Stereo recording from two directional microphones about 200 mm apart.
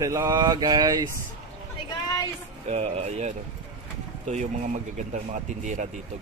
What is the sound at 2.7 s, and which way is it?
Speech, 30° right (ahead or behind).